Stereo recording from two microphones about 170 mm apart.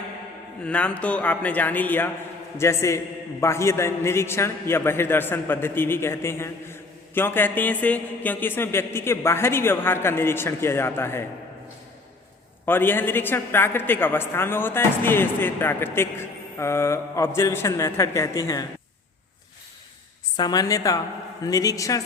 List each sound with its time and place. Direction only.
0.6 s a man's voice: 5° left (ahead or behind)
12.6 s a man's voice: 10° left (ahead or behind)
20.3 s a woman's voice: 25° left (ahead or behind)